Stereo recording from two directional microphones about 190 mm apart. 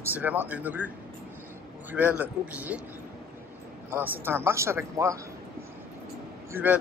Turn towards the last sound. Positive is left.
turn(degrees=-10)  # may be behind; listen again after turning